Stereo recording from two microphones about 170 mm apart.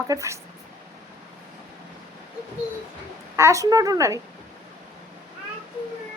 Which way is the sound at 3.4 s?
15° right (ahead or behind).